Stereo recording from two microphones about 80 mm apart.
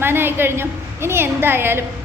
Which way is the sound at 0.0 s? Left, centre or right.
Right.